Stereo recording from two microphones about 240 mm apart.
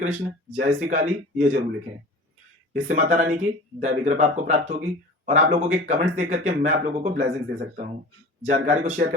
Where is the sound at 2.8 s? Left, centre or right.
Right.